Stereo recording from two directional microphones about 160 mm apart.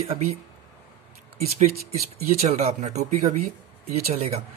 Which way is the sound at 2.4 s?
40° right (ahead or behind).